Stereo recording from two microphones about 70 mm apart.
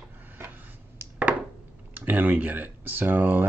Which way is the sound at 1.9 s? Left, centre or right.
Right.